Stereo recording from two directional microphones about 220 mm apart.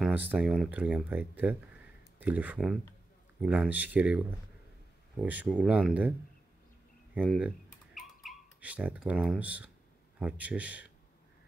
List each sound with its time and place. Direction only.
0.0 s speech: 5° right (ahead or behind)
5.2 s speech: 5° right (ahead or behind)
7.2 s a sound: 5° right (ahead or behind)
10.1 s speech: 5° right (ahead or behind)